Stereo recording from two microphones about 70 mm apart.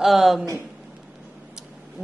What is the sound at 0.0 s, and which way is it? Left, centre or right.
Speech, centre.